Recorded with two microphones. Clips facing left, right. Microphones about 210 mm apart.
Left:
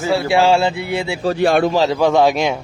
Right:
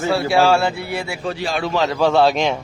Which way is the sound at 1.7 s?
30° left (ahead or behind).